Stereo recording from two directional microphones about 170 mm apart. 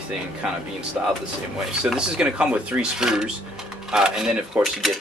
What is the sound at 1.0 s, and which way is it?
Speech, 5° right (ahead or behind).